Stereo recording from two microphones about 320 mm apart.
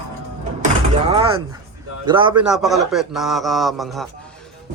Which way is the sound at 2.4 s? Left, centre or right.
Centre.